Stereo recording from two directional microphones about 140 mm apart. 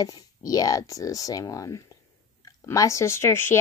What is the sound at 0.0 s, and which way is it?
Speech, 25° left (ahead or behind).